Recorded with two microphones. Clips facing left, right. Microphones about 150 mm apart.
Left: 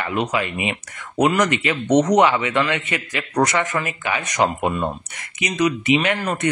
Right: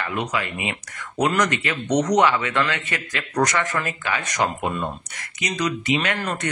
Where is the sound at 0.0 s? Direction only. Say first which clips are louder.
Left 4 dB; 25° left (ahead or behind).